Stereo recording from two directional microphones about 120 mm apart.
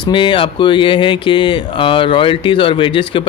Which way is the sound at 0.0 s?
40° left (ahead or behind).